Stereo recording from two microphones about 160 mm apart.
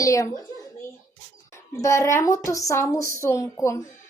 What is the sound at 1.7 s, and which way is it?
Speech, 15° left (ahead or behind).